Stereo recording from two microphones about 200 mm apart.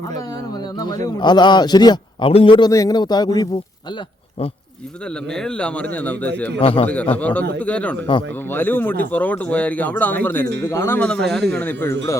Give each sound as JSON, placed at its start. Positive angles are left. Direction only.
{"t": 0.8, "sound": "a man's voice", "side_deg": 20}
{"t": 5.3, "sound": "a man's voice", "side_deg": 5}
{"t": 6.6, "sound": "a man's voice", "side_deg": 30}
{"t": 6.8, "sound": "speech", "side_deg": 10}